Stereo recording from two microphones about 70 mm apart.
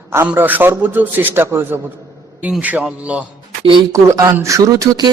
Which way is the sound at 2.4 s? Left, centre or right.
Right.